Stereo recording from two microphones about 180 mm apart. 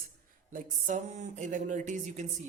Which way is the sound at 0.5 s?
45° right (ahead or behind).